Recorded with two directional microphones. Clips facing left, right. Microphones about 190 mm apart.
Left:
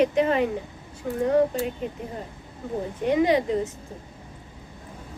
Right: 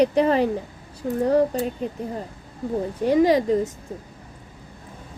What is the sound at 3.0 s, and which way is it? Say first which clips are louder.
Speech: right 3 dB; 40° right (ahead or behind).